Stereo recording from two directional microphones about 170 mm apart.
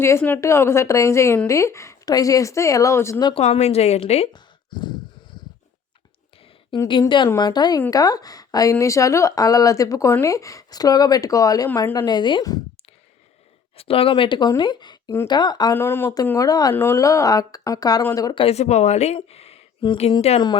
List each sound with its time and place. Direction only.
0.0 s a woman's voice: 15° left (ahead or behind)
3.4 s a woman's voice: 40° left (ahead or behind)
4.3 s a sound: 25° left (ahead or behind)
6.7 s a woman's voice: 30° left (ahead or behind); by 12.0 s 15° left (ahead or behind)
12.0 s a woman's voice: 25° left (ahead or behind)
13.7 s a woman's voice: 35° left (ahead or behind)
15.7 s a woman's voice: 15° left (ahead or behind)
18.4 s speech: 40° left (ahead or behind)